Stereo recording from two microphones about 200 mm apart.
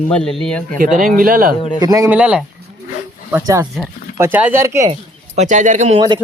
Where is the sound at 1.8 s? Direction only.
15° right (ahead or behind).